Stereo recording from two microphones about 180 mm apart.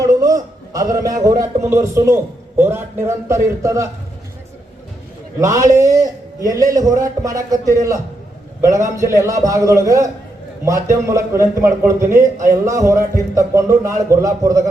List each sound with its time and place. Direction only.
0.0 s a sound: 20° right (ahead or behind)
1.2 s a man's voice: 20° right (ahead or behind)
5.4 s a man's voice: 15° right (ahead or behind)